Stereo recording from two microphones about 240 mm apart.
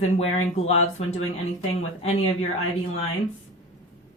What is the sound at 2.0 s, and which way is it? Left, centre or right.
Speech, left.